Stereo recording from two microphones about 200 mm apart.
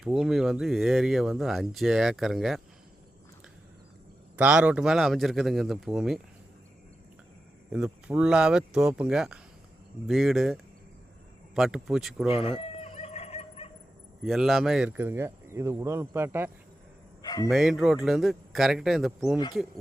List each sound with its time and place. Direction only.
0.0 s speech: centre (ahead or behind)
4.4 s speech: 5° right (ahead or behind)
7.7 s speech: 5° right (ahead or behind)
12.5 s fowl: 30° left (ahead or behind)
14.3 s speech: centre (ahead or behind)
17.2 s speech: 20° left (ahead or behind)
17.5 s speech: centre (ahead or behind)